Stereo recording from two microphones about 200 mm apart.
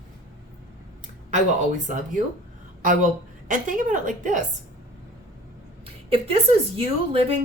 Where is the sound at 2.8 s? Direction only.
40° right (ahead or behind).